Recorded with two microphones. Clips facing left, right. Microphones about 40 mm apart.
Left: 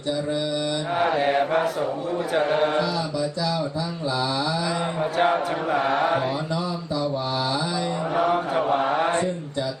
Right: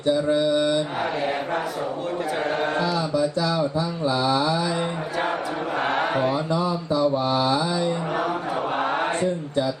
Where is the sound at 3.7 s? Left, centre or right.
Right.